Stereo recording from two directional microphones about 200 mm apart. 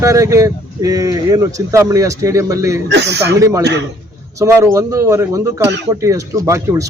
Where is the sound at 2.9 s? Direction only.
60° right (ahead or behind).